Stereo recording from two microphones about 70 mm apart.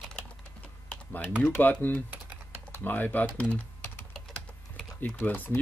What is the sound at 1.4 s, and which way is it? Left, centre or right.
Speech, left.